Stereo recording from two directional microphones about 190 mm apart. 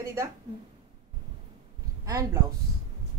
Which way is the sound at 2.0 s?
15° right (ahead or behind).